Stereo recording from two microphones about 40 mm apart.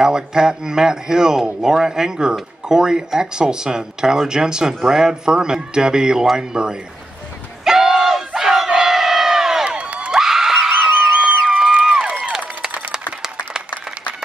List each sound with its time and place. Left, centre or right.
0.0 s speech: centre
7.6 s battle cry: centre
9.7 s crowd: right
10.1 s a sound: centre
10.7 s a sound: right
11.8 s run: centre